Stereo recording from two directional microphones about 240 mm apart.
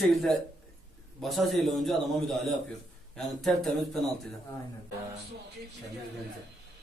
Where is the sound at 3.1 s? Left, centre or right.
Centre.